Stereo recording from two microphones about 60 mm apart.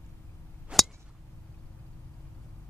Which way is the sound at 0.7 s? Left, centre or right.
Centre.